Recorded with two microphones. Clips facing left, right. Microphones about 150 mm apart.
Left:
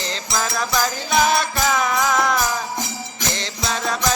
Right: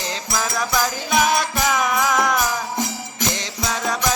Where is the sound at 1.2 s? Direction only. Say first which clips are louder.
Left 1 dB; 10° right (ahead or behind).